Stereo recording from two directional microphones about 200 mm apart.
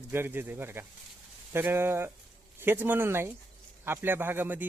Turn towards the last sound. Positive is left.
turn(degrees=-10)  # may be behind; listen again after turning